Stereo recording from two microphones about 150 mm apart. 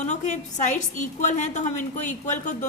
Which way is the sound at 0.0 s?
50° left (ahead or behind).